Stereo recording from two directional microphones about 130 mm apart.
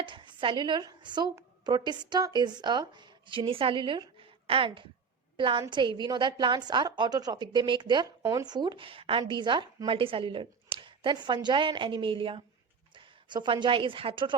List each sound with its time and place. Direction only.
0.0 s a woman's voice: 40° right (ahead or behind)